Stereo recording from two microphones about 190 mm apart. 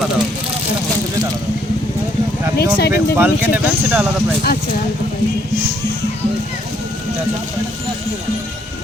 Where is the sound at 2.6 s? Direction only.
55° left (ahead or behind).